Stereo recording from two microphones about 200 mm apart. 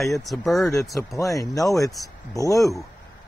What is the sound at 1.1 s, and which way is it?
Speech, 15° left (ahead or behind).